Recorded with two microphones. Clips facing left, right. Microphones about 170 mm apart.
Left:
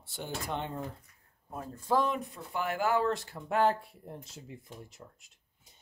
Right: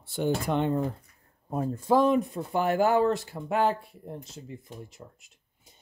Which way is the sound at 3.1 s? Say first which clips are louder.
Right 5 dB; 10° right (ahead or behind).